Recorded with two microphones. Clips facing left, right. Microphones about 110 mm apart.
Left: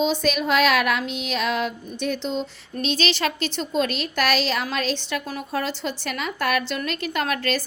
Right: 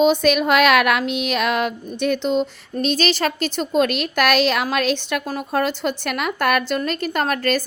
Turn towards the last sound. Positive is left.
turn(degrees=-45)  # may be behind; listen again after turning